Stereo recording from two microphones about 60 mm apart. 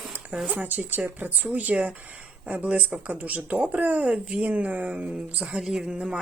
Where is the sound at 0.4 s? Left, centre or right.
Right.